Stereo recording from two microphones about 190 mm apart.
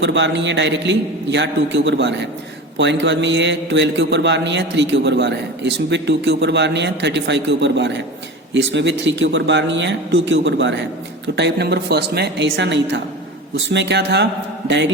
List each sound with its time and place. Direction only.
0.0 s a man's voice: 70° right (ahead or behind)